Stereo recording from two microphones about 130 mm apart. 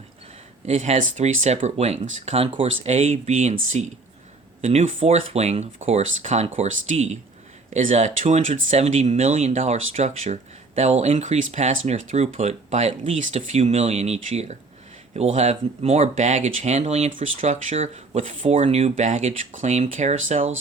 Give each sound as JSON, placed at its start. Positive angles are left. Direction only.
{"t": 0.6, "sound": "speech", "side_deg": -60}
{"t": 4.9, "sound": "speech", "side_deg": -55}